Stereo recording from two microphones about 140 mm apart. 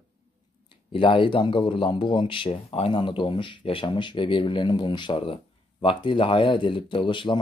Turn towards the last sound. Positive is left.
turn(degrees=35)  # may be behind; listen again after turning